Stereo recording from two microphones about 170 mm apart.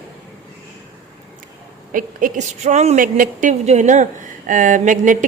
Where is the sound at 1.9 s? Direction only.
50° right (ahead or behind).